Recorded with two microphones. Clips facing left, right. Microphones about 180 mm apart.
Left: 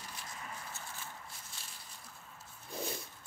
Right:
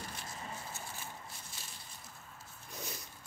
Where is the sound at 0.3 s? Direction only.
25° right (ahead or behind).